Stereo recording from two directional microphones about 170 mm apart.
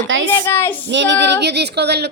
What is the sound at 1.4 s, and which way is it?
Speech, 80° right.